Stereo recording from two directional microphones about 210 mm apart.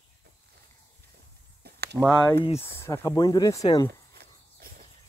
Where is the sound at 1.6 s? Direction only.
50° right (ahead or behind).